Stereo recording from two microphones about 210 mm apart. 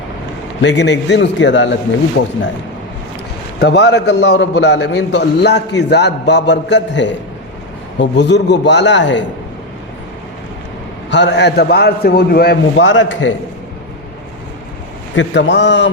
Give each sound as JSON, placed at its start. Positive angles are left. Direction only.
{"t": 0.6, "sound": "a man's voice", "side_deg": 55}
{"t": 3.6, "sound": "a man's voice", "side_deg": 55}
{"t": 11.1, "sound": "a man's voice", "side_deg": 55}
{"t": 15.1, "sound": "a man's voice", "side_deg": 60}